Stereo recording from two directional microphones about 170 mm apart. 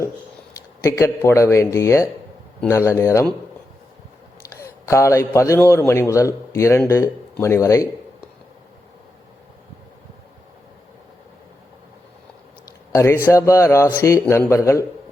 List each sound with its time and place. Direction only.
0.8 s a man's voice: 15° left (ahead or behind)
4.5 s a man's voice: 15° left (ahead or behind)
12.9 s a man's voice: 15° left (ahead or behind)